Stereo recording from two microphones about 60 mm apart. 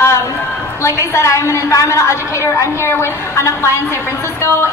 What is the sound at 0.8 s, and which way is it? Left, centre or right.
A woman's voice, left.